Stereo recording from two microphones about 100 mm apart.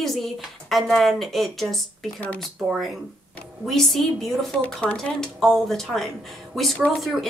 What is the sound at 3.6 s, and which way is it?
Speech, centre (ahead or behind).